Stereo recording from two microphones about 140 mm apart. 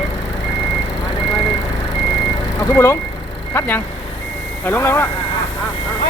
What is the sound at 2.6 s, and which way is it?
Speech, 20° left (ahead or behind).